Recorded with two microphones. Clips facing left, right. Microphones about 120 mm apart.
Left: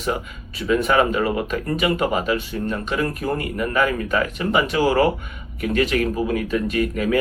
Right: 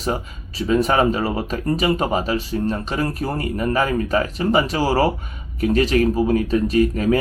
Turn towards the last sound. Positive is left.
turn(degrees=-35)  # may be behind; listen again after turning